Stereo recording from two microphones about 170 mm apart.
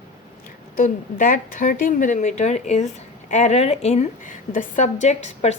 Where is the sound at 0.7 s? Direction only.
55° left (ahead or behind).